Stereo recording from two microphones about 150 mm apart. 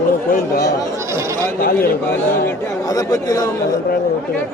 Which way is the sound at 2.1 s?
20° left (ahead or behind).